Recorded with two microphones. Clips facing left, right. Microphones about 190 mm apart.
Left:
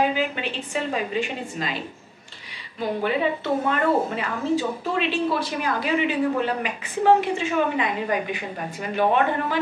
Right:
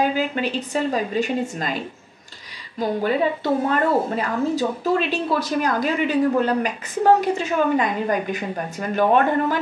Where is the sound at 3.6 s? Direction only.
40° right (ahead or behind).